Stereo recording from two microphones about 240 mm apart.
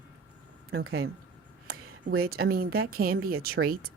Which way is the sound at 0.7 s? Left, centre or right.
Right.